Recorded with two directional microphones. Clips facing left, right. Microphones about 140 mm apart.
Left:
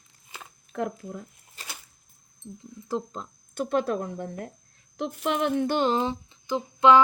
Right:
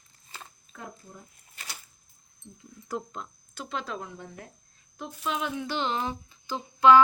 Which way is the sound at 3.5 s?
50° left (ahead or behind).